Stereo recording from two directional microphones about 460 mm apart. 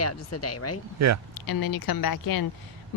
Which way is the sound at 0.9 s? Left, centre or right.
Right.